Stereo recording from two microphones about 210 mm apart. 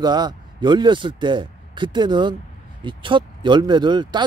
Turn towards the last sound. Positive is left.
turn(degrees=-20)  # may be behind; listen again after turning